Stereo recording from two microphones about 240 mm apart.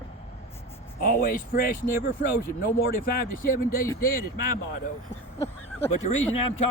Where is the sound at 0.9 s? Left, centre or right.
Left.